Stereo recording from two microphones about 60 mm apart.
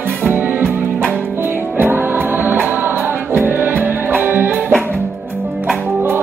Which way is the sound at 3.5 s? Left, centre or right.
Right.